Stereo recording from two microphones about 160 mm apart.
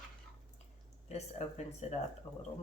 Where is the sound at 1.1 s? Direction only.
45° left (ahead or behind).